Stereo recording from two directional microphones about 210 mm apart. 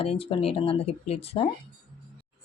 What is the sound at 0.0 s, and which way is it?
A woman's voice, 25° left (ahead or behind).